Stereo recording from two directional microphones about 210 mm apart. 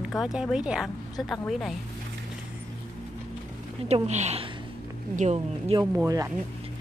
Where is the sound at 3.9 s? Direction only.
30° right (ahead or behind).